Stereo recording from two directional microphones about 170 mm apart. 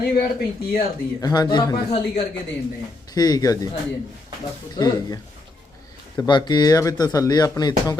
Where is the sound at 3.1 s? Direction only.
20° left (ahead or behind).